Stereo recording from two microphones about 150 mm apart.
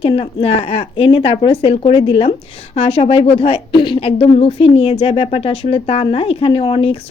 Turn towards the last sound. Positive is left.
turn(degrees=35)  # may be behind; listen again after turning